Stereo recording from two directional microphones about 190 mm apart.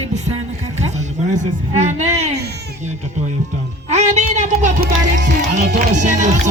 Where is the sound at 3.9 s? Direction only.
35° right (ahead or behind).